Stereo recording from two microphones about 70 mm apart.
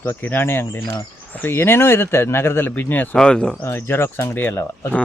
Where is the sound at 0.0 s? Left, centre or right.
Left.